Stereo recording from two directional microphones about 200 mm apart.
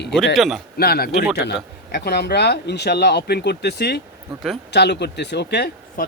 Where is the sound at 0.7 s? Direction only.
50° left (ahead or behind).